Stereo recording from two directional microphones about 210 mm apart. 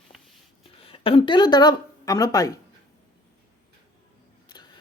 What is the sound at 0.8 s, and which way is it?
Speech, 25° left (ahead or behind).